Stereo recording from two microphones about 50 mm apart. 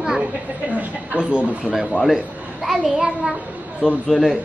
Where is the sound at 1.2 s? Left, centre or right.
Centre.